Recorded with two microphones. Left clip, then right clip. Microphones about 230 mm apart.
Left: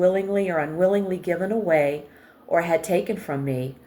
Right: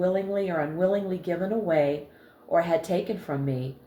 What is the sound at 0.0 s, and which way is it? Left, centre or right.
Speech, left.